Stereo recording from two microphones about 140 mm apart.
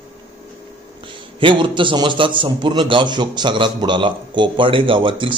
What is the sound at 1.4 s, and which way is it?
A man's voice, 35° right (ahead or behind).